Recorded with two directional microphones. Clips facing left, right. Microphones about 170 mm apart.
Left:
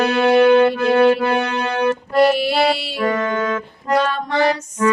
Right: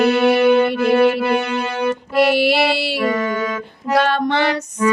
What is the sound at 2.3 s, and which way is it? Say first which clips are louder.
Music: right 1 dB; 75° right (ahead or behind).